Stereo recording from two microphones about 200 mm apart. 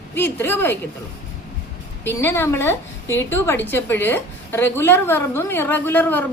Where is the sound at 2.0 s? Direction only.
10° left (ahead or behind).